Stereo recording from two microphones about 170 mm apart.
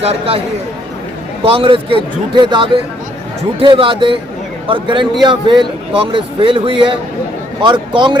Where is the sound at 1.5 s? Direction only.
30° right (ahead or behind).